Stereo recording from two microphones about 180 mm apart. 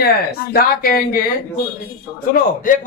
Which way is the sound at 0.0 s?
55° left (ahead or behind).